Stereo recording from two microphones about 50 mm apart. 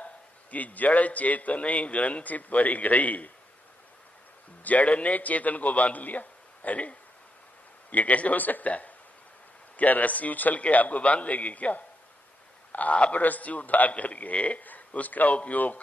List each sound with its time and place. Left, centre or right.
0.0 s a man's voice: left
4.6 s a man's voice: left